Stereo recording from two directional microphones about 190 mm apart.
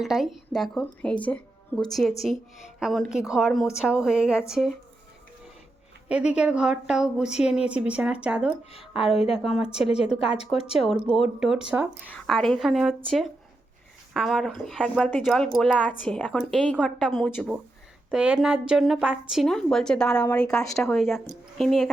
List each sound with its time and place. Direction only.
0.0 s speech: centre (ahead or behind)
6.1 s a woman's voice: 5° right (ahead or behind)
9.1 s a woman's voice: 30° left (ahead or behind)
9.4 s speech: centre (ahead or behind)
9.7 s a woman's voice: 30° left (ahead or behind)
10.8 s speech: centre (ahead or behind)
14.1 s speech: centre (ahead or behind)